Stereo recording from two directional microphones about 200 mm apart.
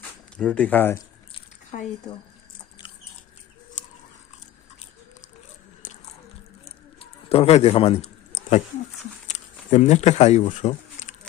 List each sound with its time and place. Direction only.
0.3 s speech: 5° left (ahead or behind)
1.3 s drip: 35° left (ahead or behind)
5.8 s biting: 40° left (ahead or behind)
6.7 s a sound: 30° left (ahead or behind)
9.2 s speech: 35° left (ahead or behind)